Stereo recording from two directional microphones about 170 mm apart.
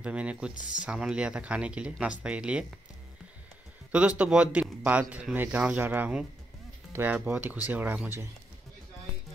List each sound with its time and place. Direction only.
0.0 s speech: 5° right (ahead or behind)
0.6 s speech: 50° left (ahead or behind)
0.8 s speech: 5° right (ahead or behind)
4.2 s speech: 5° right (ahead or behind)